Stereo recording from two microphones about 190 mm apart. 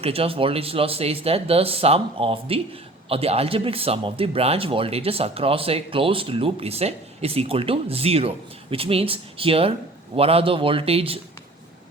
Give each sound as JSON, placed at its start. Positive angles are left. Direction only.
{"t": 0.0, "sound": "speech", "side_deg": -30}